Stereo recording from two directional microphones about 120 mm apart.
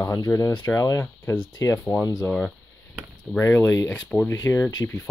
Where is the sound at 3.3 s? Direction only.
20° left (ahead or behind).